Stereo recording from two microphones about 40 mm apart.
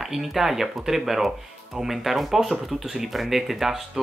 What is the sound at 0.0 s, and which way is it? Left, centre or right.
Speech, centre.